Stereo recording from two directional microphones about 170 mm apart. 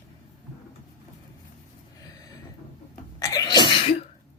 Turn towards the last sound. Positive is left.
turn(degrees=30)  # may be behind; listen again after turning